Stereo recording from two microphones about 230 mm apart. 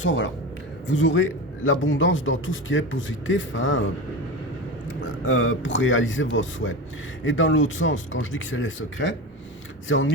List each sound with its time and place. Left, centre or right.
0.0 s a man's voice: left
4.9 s a man's voice: left